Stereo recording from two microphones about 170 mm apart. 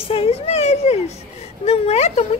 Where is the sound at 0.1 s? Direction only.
35° left (ahead or behind).